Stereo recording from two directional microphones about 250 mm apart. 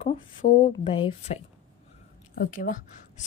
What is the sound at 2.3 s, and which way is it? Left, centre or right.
Speech, left.